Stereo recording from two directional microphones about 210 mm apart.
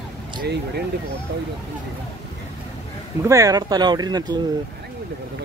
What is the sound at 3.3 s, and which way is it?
Speech, 15° right (ahead or behind).